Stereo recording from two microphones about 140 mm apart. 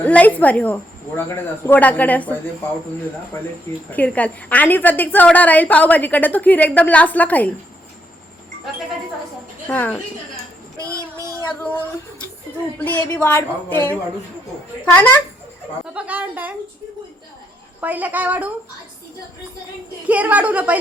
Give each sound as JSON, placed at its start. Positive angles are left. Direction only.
{"t": 0.0, "sound": "a woman's voice", "side_deg": 10}
{"t": 3.8, "sound": "a woman's voice", "side_deg": 10}
{"t": 9.6, "sound": "a woman's voice", "side_deg": 10}
{"t": 10.8, "sound": "child singing", "side_deg": -25}
{"t": 13.1, "sound": "a woman's voice", "side_deg": 15}
{"t": 15.9, "sound": "speech", "side_deg": -10}
{"t": 17.7, "sound": "speech", "side_deg": -10}
{"t": 20.1, "sound": "speech", "side_deg": -10}